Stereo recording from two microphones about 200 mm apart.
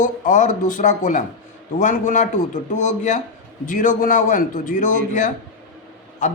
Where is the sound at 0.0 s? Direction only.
40° left (ahead or behind).